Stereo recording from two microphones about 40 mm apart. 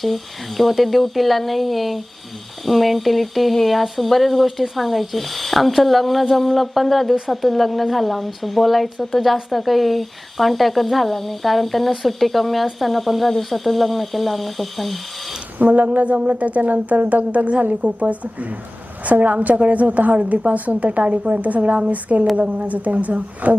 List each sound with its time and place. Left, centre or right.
0.0 s speech: centre
15.5 s speech: right